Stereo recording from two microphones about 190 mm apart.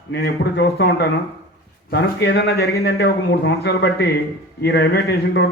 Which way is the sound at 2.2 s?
55° left (ahead or behind).